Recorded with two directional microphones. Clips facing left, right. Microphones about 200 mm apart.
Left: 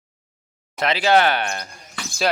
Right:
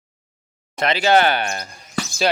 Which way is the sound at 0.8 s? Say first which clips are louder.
Right 1 dB; centre (ahead or behind).